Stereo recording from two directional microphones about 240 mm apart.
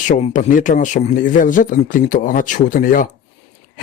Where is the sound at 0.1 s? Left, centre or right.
Left.